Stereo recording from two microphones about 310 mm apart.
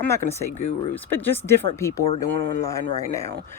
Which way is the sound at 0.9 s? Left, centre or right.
Centre.